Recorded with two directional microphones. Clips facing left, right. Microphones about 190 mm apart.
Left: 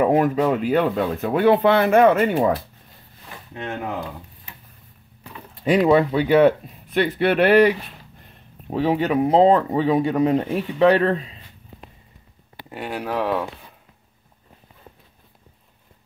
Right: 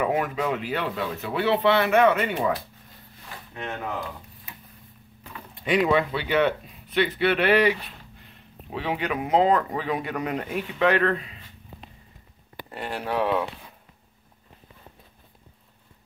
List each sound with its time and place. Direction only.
0.0 s speech: 40° left (ahead or behind)
5.5 s speech: 40° left (ahead or behind)
12.6 s speech: 5° left (ahead or behind)